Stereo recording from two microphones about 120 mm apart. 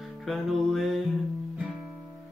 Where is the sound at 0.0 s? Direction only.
Centre (ahead or behind).